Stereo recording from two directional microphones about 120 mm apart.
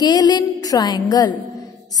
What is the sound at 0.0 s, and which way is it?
A woman's voice, 35° left (ahead or behind).